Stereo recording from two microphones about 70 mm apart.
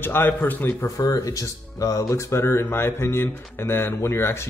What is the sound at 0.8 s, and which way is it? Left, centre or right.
Speech, left.